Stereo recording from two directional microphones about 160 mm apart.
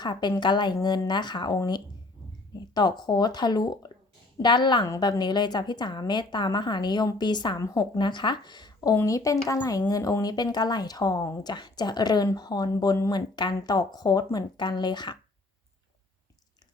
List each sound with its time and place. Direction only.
0.0 s speech: 25° left (ahead or behind)